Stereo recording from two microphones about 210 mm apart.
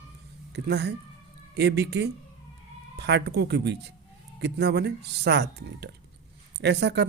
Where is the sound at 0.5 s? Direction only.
50° right (ahead or behind).